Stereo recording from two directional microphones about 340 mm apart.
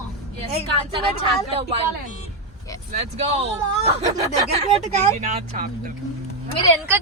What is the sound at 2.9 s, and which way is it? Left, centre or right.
Speech, centre.